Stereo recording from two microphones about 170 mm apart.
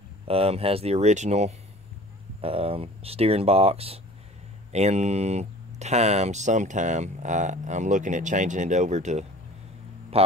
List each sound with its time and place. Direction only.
0.3 s speech: 35° right (ahead or behind)